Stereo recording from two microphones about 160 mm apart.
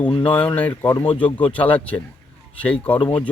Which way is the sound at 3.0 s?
30° left (ahead or behind).